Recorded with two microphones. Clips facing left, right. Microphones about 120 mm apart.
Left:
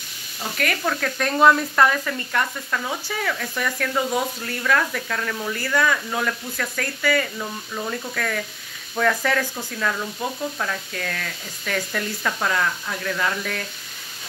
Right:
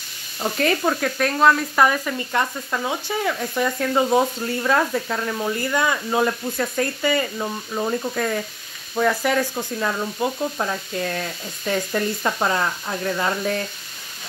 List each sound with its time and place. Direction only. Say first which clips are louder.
0.4 s speech: right 5 dB; 25° right (ahead or behind)
1.0 s speech: left 2 dB; 5° right (ahead or behind)
1.8 s speech: right 1 dB; 10° right (ahead or behind)
2.3 s speech: right 1 dB; 20° right (ahead or behind)